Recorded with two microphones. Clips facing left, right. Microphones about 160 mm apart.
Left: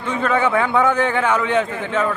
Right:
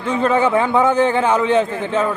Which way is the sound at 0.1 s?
30° right (ahead or behind).